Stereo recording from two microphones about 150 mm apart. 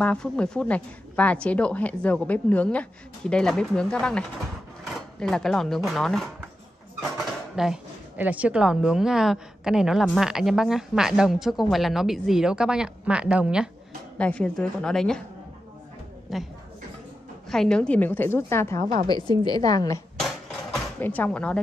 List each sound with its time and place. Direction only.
0.0 s a woman's voice: 5° left (ahead or behind)
5.2 s speech: 5° left (ahead or behind)
14.1 s speech: 10° left (ahead or behind)
16.3 s a woman's voice: centre (ahead or behind); by 18.9 s 15° left (ahead or behind)
19.0 s a woman's voice: 25° left (ahead or behind)
21.0 s a woman's voice: 10° left (ahead or behind)